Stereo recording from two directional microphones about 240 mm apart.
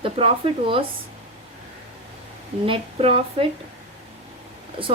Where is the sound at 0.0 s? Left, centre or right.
Right.